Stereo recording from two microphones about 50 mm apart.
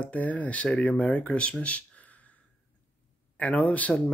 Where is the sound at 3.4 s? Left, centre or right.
Left.